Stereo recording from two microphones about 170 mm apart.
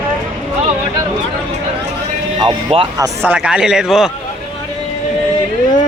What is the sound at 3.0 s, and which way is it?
A man's voice, 10° right (ahead or behind).